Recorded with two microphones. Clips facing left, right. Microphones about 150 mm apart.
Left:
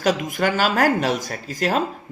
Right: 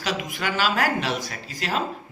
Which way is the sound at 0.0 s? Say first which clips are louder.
Left 7 dB; 45° left (ahead or behind).